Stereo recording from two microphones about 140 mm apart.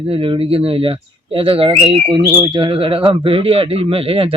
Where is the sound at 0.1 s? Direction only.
40° right (ahead or behind).